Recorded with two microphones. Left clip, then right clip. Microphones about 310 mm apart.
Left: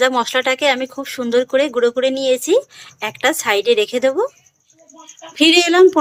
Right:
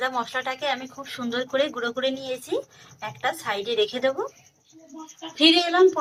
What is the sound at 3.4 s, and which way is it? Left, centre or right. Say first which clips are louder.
Speech: left 10 dB; left.